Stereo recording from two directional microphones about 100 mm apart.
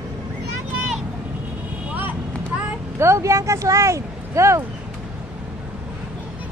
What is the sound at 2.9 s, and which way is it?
Speech, 30° right (ahead or behind).